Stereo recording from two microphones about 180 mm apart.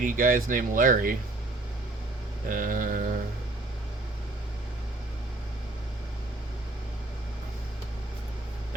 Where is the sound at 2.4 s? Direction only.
50° right (ahead or behind).